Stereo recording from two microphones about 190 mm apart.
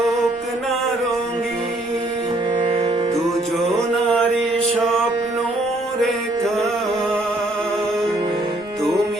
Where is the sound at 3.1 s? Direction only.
Centre (ahead or behind).